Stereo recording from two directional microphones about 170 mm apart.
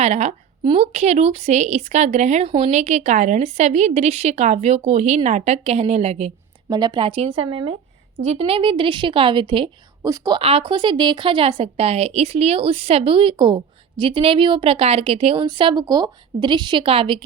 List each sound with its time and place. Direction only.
0.0 s a woman's voice: 40° right (ahead or behind)
6.7 s a woman's voice: 25° right (ahead or behind)
10.4 s a woman's voice: 30° right (ahead or behind)